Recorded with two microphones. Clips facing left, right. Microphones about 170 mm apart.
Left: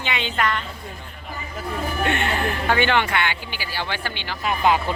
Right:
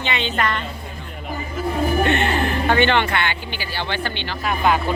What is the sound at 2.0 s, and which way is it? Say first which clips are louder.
A man's voice: right 3 dB; 10° left (ahead or behind).